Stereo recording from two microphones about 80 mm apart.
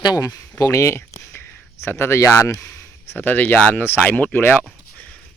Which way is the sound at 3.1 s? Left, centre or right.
Left.